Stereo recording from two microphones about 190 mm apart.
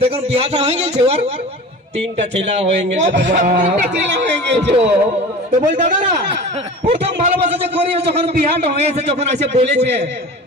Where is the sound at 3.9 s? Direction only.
65° right (ahead or behind).